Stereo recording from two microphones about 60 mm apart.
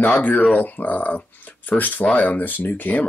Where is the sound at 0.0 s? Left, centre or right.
Left.